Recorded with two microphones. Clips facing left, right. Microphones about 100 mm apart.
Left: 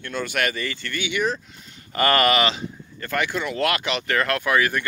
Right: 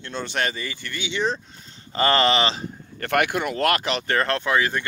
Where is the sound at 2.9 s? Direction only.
60° right (ahead or behind); by 4.9 s 25° right (ahead or behind).